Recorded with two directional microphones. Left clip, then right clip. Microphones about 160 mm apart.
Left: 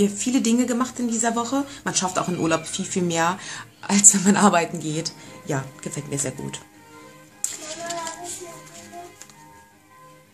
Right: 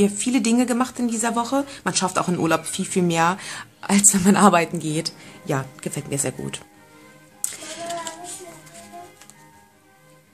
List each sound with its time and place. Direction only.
0.0 s speech: 35° right (ahead or behind)